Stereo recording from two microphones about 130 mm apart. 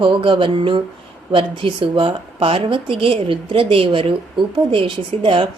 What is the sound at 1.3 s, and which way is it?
Speech, 40° right (ahead or behind).